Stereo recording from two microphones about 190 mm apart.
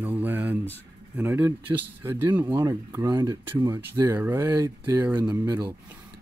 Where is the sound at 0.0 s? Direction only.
10° right (ahead or behind).